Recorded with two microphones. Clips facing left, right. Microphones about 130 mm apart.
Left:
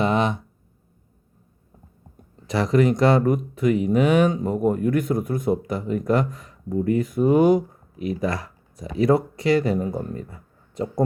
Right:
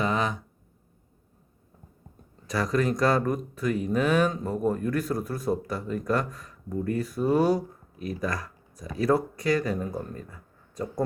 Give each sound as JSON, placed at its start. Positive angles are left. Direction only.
{"t": 2.5, "sound": "speech", "side_deg": 25}